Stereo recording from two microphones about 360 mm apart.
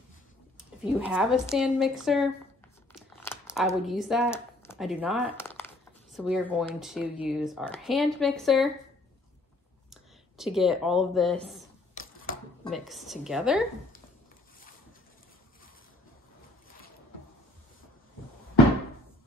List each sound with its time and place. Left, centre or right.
0.9 s speech: centre
9.8 s speech: centre
11.9 s a sound: left
12.6 s speech: centre